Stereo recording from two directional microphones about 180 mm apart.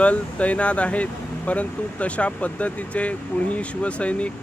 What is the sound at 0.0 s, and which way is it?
Speech, 10° left (ahead or behind).